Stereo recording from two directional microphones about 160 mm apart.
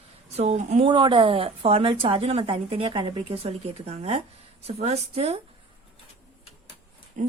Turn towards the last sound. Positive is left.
turn(degrees=-50)  # may be behind; listen again after turning